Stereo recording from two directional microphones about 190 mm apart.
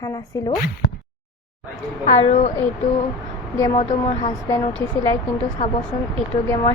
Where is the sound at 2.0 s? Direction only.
35° left (ahead or behind).